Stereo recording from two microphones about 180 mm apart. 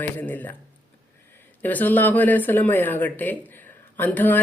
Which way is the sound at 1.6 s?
10° left (ahead or behind).